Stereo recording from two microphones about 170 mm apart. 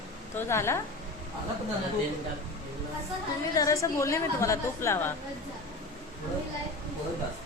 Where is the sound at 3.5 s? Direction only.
20° left (ahead or behind).